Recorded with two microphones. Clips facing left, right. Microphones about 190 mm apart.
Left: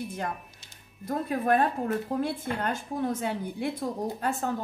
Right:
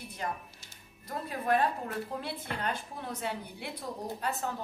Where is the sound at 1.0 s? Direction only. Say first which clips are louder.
Left 6 dB; 50° left (ahead or behind).